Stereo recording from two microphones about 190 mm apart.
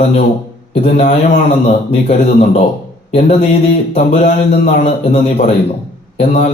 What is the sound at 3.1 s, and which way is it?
A man's voice, 40° left (ahead or behind).